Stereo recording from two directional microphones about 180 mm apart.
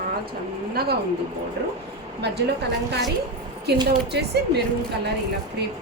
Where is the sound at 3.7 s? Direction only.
65° right (ahead or behind).